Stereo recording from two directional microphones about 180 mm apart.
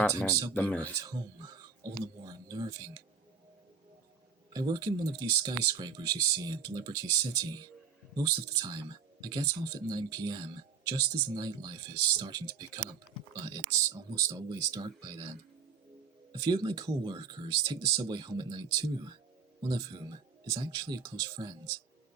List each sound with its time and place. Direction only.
0.0 s speech: 10° left (ahead or behind)
0.9 s speech: 20° right (ahead or behind)
4.5 s speech: 20° right (ahead or behind)
16.4 s speech: 20° right (ahead or behind)